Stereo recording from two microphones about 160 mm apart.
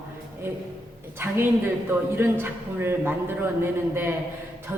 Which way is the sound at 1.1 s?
15° right (ahead or behind).